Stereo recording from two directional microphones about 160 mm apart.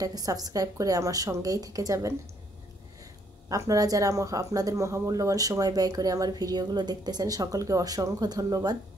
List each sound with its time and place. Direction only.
0.0 s speech: 20° right (ahead or behind)
3.4 s speech: 20° right (ahead or behind)